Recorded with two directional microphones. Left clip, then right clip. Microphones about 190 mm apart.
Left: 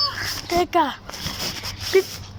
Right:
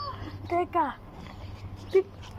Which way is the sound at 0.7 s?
35° left (ahead or behind).